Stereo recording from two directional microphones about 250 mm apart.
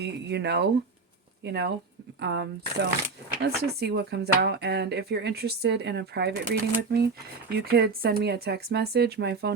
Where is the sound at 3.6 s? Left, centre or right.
Right.